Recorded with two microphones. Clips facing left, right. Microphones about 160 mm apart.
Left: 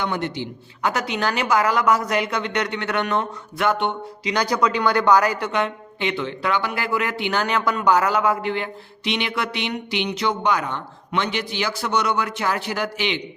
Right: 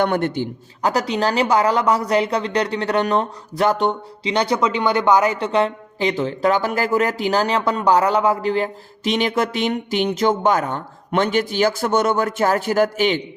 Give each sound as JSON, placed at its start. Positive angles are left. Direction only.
{"t": 0.0, "sound": "a man's voice", "side_deg": -55}
{"t": 0.8, "sound": "speech", "side_deg": -35}